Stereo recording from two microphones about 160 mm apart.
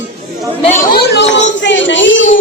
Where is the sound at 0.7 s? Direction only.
70° left (ahead or behind); by 1.8 s 90° left.